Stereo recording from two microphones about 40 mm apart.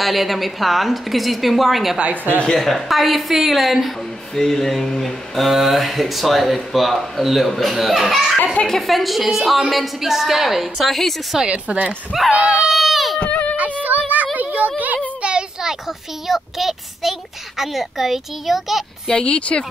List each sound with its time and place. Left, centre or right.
0.0 s a woman's voice: centre
2.4 s a woman's voice: centre
11.4 s a woman's voice: right
12.7 s run: centre
13.2 s a sound: left
14.1 s a sound: right
15.2 s a sound: right
16.3 s a child's voice: centre
19.0 s speech: left